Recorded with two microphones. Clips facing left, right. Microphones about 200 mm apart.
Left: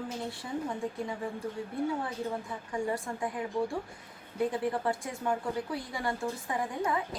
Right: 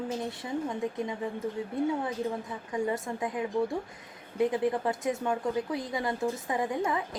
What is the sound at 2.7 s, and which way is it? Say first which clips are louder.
A woman's voice: right 2 dB; 20° right (ahead or behind).